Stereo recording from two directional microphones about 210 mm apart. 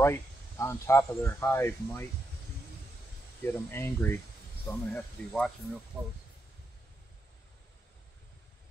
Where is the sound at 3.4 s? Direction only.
10° left (ahead or behind).